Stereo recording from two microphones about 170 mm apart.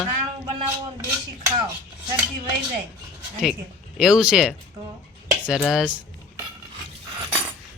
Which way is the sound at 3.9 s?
5° right (ahead or behind).